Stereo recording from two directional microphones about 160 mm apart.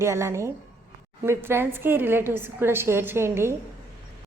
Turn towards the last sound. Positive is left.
turn(degrees=-15)  # may be behind; listen again after turning